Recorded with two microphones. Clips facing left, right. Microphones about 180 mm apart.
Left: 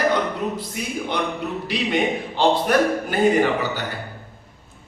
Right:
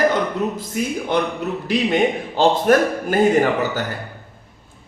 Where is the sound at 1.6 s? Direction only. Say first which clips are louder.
Right 4 dB; 45° right (ahead or behind).